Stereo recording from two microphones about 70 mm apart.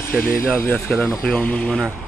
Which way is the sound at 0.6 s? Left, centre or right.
Left.